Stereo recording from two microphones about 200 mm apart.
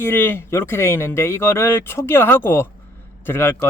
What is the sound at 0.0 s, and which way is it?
Speech, 10° left (ahead or behind).